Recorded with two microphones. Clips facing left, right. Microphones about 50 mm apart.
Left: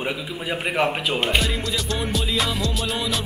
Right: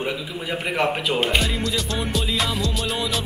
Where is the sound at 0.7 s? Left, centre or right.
Centre.